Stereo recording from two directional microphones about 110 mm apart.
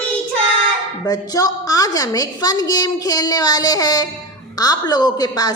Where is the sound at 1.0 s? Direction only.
35° left (ahead or behind).